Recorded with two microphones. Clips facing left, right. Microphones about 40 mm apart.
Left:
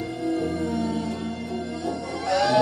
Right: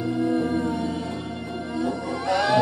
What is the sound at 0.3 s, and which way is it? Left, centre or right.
Music, right.